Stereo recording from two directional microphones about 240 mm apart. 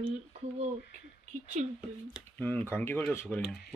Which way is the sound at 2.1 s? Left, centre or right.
Centre.